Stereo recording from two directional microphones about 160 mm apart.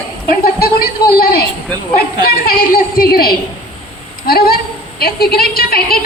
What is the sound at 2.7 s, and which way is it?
A woman's voice, 65° left (ahead or behind).